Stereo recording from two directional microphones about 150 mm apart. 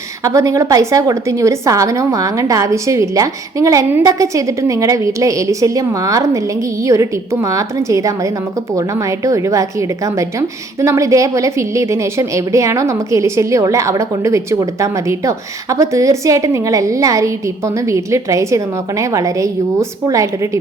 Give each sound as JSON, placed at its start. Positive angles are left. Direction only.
{"t": 0.3, "sound": "a woman's voice", "side_deg": -20}
{"t": 10.8, "sound": "a woman's voice", "side_deg": -20}